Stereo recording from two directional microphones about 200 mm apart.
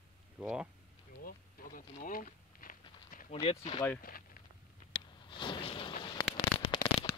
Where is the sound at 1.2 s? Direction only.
45° left (ahead or behind).